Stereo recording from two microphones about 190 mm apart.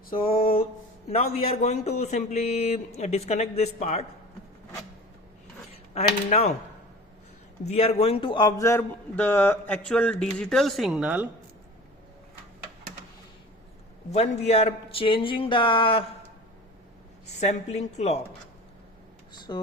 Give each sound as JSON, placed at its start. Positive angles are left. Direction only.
{"t": 0.3, "sound": "a sound", "side_deg": 30}
{"t": 1.0, "sound": "speech", "side_deg": 30}
{"t": 5.9, "sound": "speech", "side_deg": 35}
{"t": 7.6, "sound": "a man's voice", "side_deg": 35}
{"t": 14.1, "sound": "speech", "side_deg": 35}
{"t": 17.4, "sound": "speech", "side_deg": 35}
{"t": 19.5, "sound": "speech", "side_deg": 20}